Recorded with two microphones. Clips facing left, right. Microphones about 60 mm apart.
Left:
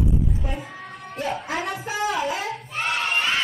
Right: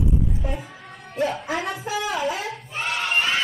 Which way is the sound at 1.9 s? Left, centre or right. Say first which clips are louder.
Left 3 dB; left.